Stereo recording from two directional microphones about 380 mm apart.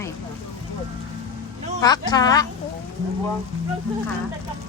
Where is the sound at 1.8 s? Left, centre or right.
Centre.